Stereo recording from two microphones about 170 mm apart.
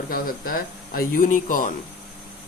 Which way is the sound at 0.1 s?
55° left (ahead or behind).